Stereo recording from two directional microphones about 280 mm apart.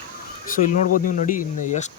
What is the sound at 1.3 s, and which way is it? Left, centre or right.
Speech, left.